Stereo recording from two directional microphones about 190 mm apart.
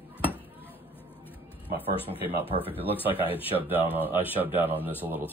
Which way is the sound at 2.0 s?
30° left (ahead or behind).